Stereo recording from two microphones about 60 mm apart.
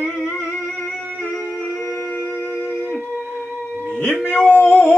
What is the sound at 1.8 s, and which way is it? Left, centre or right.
Music, left.